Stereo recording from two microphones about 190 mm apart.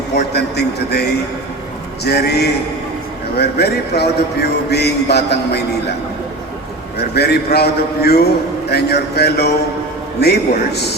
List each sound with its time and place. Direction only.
0.3 s a man's voice: 60° left (ahead or behind)
2.0 s a man's voice: 60° left (ahead or behind)
7.0 s a man's voice: 60° left (ahead or behind)